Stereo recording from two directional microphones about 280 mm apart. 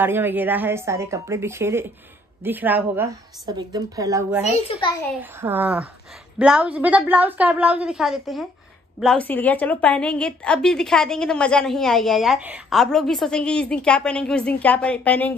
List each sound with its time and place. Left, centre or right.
0.0 s a woman's voice: centre
4.5 s a child's voice: centre
5.2 s a woman's voice: centre